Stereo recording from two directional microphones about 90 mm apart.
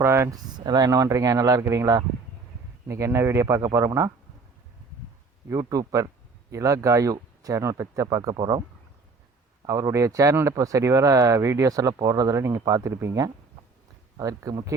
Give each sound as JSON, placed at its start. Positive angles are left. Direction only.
{"t": 0.0, "sound": "a sound", "side_deg": -30}
{"t": 0.3, "sound": "speech", "side_deg": -50}
{"t": 0.9, "sound": "speech", "side_deg": -35}
{"t": 5.5, "sound": "speech", "side_deg": -40}
{"t": 9.6, "sound": "speech", "side_deg": -40}
{"t": 14.2, "sound": "speech", "side_deg": -40}